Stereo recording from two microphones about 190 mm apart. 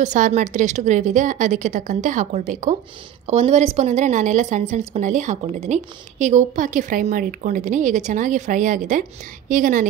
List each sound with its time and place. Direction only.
0.0 s a woman's voice: 40° right (ahead or behind)